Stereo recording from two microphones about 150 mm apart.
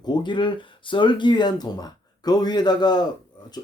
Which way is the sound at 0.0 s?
30° left (ahead or behind).